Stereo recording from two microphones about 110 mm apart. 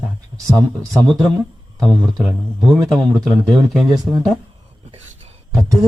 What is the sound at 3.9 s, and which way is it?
Speech, 35° right (ahead or behind).